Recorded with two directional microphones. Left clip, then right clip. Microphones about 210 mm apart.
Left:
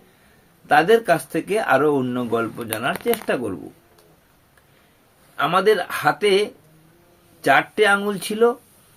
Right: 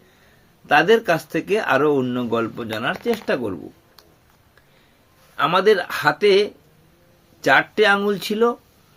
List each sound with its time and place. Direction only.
0.7 s speech: 20° right (ahead or behind)
5.4 s speech: 25° right (ahead or behind)